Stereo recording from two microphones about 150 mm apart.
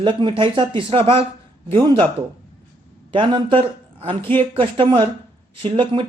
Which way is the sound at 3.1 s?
30° right (ahead or behind).